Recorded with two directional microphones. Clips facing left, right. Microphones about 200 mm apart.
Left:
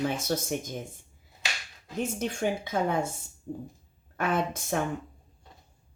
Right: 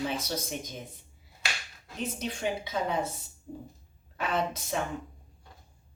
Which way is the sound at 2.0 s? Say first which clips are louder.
Left 3 dB; 50° left (ahead or behind).